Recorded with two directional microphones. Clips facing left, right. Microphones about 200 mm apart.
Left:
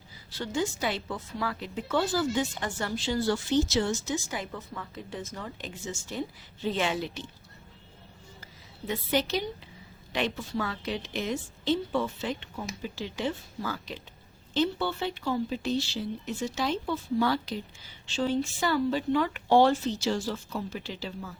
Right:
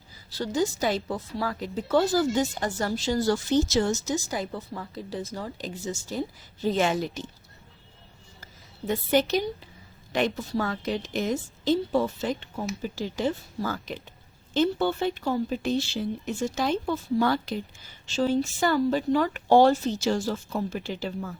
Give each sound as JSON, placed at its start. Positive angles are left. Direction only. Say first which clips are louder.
{"t": 0.3, "sound": "a woman's voice", "louder": "right 4 dB", "side_deg": -40}
{"t": 8.9, "sound": "a woman's voice", "louder": "right 5 dB", "side_deg": -50}